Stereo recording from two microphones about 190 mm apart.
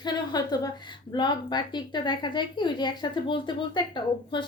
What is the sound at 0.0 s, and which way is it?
A woman's voice, 20° left (ahead or behind).